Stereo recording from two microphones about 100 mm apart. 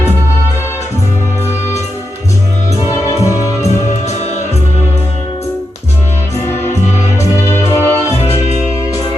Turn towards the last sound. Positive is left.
turn(degrees=25)  # may be behind; listen again after turning